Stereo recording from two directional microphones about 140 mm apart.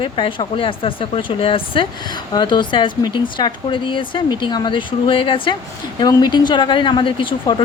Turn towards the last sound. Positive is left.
turn(degrees=35)  # may be behind; listen again after turning